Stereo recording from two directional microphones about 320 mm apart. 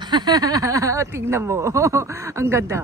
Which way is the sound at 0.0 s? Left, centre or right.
Centre.